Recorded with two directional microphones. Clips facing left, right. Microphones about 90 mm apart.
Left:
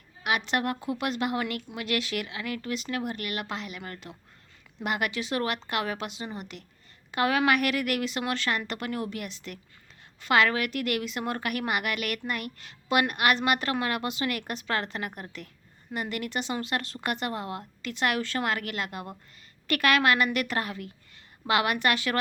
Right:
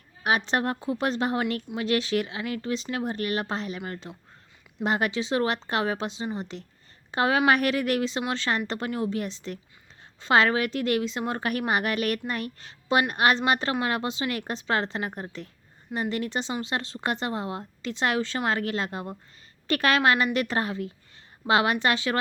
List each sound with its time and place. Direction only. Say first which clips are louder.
0.2 s a woman's voice: right 3 dB; 35° right (ahead or behind)